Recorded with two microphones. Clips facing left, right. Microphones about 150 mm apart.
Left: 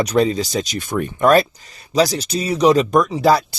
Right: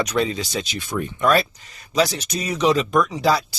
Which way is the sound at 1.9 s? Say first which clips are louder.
Left 4 dB; 35° left (ahead or behind).